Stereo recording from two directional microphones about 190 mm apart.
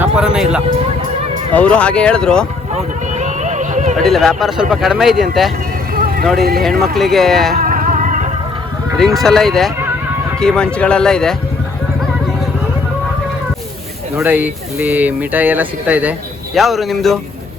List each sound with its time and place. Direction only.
0.0 s a sound: 5° right (ahead or behind)
1.5 s speech: 5° left (ahead or behind)
2.7 s a sound: 40° right (ahead or behind)
3.9 s speech: centre (ahead or behind)
5.9 s vehicle: 50° right (ahead or behind)
6.8 s speech: centre (ahead or behind)
7.5 s music: 45° right (ahead or behind)
9.0 s speech: centre (ahead or behind)
14.2 s speech: 10° right (ahead or behind)